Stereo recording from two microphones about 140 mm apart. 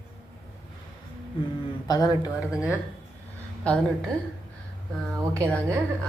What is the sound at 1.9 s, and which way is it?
Speech, 25° left (ahead or behind).